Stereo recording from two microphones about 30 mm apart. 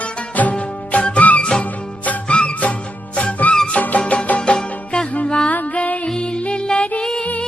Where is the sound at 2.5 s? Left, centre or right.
Left.